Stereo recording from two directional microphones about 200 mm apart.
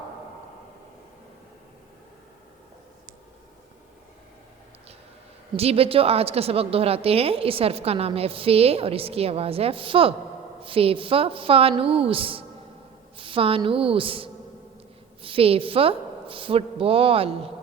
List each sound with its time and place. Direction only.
5.5 s a woman's voice: 30° right (ahead or behind)